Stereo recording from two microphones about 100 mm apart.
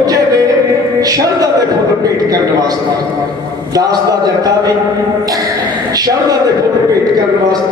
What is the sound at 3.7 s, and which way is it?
A man's voice, 40° right (ahead or behind).